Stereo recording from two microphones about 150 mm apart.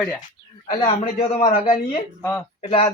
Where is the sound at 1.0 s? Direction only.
55° left (ahead or behind).